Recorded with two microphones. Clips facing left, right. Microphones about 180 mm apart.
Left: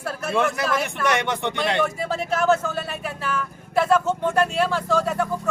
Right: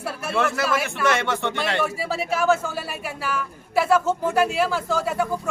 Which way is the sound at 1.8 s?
5° right (ahead or behind).